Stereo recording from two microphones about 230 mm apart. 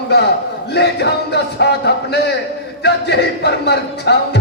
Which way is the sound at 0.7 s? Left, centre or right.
Left.